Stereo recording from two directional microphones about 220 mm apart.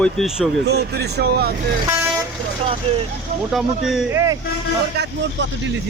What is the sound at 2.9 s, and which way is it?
Speech, 25° right (ahead or behind).